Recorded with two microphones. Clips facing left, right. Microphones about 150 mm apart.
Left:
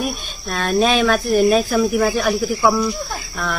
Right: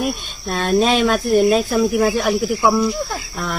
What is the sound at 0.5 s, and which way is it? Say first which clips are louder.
Speech: right 1 dB; 25° right (ahead or behind).